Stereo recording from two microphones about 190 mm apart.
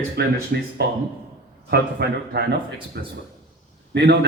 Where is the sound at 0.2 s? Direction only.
55° right (ahead or behind).